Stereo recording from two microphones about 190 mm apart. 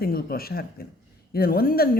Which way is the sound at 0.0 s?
55° left (ahead or behind).